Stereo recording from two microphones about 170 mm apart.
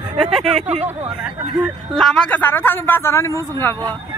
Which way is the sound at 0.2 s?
Centre (ahead or behind).